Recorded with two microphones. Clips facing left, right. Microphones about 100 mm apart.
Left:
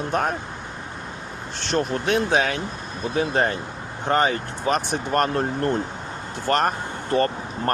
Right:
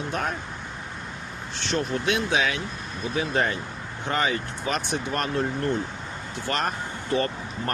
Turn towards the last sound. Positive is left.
turn(degrees=45)  # may be behind; listen again after turning